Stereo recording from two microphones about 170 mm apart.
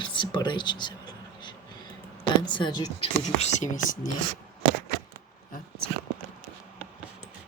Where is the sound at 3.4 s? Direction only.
45° left (ahead or behind).